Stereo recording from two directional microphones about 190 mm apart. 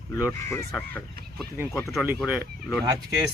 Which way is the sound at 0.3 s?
15° left (ahead or behind).